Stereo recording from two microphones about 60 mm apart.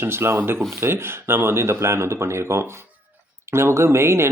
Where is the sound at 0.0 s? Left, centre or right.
Right.